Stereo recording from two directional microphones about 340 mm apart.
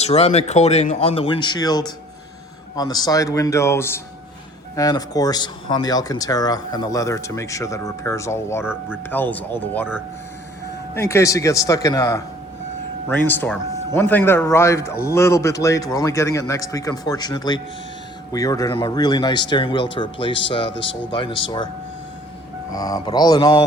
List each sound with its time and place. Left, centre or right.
0.0 s speech: centre
22.7 s speech: centre